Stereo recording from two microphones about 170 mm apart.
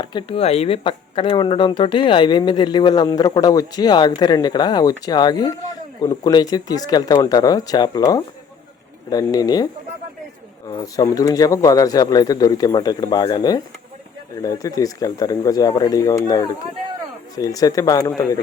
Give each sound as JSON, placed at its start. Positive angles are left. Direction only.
{"t": 0.0, "sound": "speech", "side_deg": 25}
{"t": 10.7, "sound": "speech", "side_deg": 25}